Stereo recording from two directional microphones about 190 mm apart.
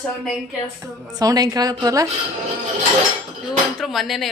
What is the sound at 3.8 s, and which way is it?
Speech, centre (ahead or behind).